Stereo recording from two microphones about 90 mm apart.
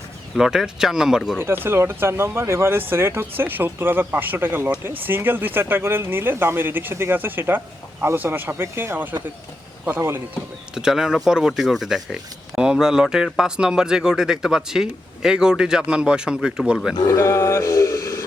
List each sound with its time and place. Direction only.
0.3 s speech: 5° right (ahead or behind)
1.4 s speech: 25° right (ahead or behind)
10.8 s speech: 5° right (ahead or behind)
17.1 s a sound: 35° left (ahead or behind)